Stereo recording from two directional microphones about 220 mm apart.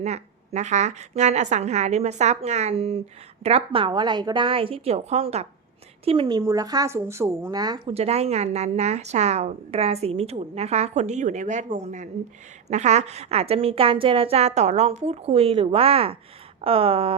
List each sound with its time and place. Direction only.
0.0 s a woman's voice: 30° right (ahead or behind)